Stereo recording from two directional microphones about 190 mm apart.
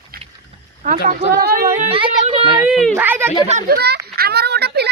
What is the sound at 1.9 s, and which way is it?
Speech, 30° right (ahead or behind).